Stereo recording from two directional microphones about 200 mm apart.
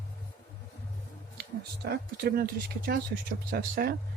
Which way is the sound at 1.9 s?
50° right (ahead or behind).